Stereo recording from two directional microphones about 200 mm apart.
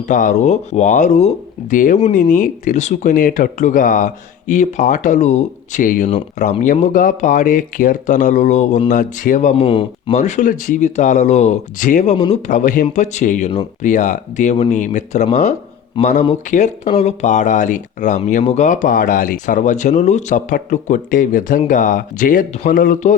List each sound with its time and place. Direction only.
0.1 s speech: 40° left (ahead or behind)
6.1 s speech: 30° left (ahead or behind)
12.1 s speech: 25° left (ahead or behind)
12.5 s speech: 40° left (ahead or behind)